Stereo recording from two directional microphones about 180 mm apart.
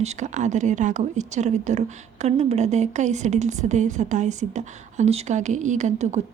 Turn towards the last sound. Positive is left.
turn(degrees=-40)  # may be behind; listen again after turning